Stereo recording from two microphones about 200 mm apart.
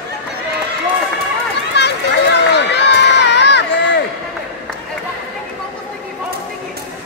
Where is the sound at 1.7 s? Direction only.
55° left (ahead or behind).